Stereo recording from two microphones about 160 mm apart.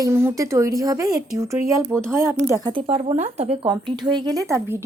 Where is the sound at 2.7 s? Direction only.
40° right (ahead or behind).